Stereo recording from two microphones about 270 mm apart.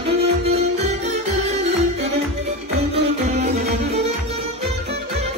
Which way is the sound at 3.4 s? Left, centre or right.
Right.